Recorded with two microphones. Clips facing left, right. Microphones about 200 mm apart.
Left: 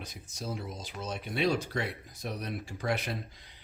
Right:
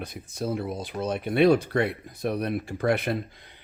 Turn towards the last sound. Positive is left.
turn(degrees=-60)  # may be behind; listen again after turning